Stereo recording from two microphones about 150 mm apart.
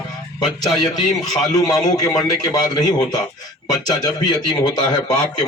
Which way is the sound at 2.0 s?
25° left (ahead or behind).